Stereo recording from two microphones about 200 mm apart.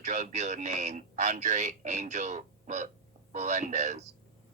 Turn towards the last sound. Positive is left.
turn(degrees=-35)  # may be behind; listen again after turning